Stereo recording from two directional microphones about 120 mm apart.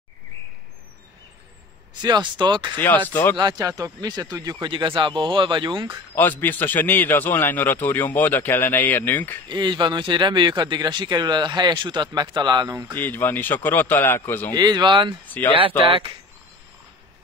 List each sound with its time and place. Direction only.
2.0 s speech: 35° right (ahead or behind)
3.1 s a man's voice: 15° left (ahead or behind)
3.3 s speech: 30° right (ahead or behind)
6.1 s a man's voice: 15° left (ahead or behind)
9.5 s speech: 40° right (ahead or behind)
12.9 s a man's voice: 15° left (ahead or behind)
14.5 s speech: 35° right (ahead or behind)
15.2 s speech: 15° left (ahead or behind)
15.8 s speech: 50° right (ahead or behind)